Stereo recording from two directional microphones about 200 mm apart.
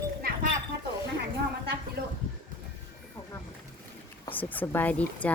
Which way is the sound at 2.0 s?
50° right (ahead or behind).